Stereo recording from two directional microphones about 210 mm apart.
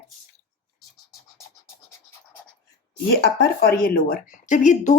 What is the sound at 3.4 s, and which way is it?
Speech, 45° left (ahead or behind).